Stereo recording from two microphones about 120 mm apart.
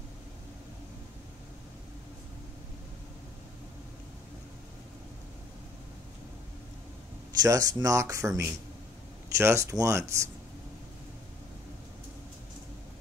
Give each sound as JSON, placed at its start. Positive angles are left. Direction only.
{"t": 7.4, "sound": "speech", "side_deg": -30}